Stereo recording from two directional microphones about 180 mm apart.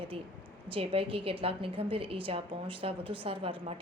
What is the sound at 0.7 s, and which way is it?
A woman's voice, 30° right (ahead or behind).